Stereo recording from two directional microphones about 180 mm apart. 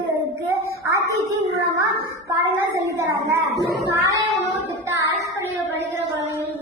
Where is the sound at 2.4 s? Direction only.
15° right (ahead or behind).